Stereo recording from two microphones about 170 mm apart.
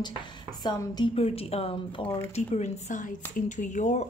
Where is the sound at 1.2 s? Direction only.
35° left (ahead or behind).